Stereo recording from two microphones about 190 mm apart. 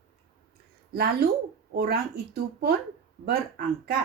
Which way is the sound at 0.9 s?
55° right (ahead or behind).